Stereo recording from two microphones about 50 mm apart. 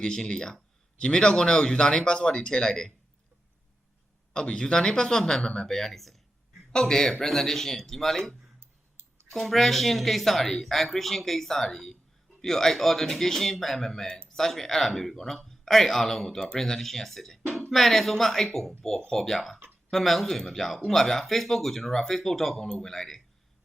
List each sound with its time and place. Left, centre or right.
0.0 s speech: centre
4.4 s speech: centre